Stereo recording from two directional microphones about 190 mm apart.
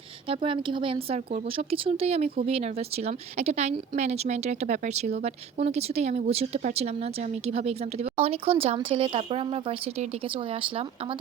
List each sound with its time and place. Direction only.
0.4 s a woman's voice: 25° right (ahead or behind)
1.0 s a woman's voice: 35° right (ahead or behind)